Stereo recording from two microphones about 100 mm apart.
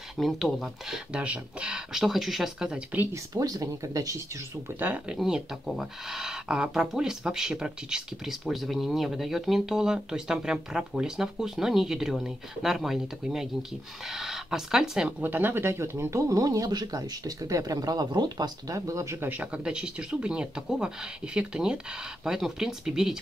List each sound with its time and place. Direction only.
0.2 s speech: centre (ahead or behind)
3.1 s speech: 35° right (ahead or behind)
4.7 s speech: 15° right (ahead or behind); by 19.2 s 30° right (ahead or behind)
19.2 s speech: 15° right (ahead or behind)